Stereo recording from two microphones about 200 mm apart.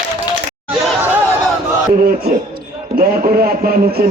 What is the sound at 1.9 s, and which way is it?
A man's voice, 45° right (ahead or behind).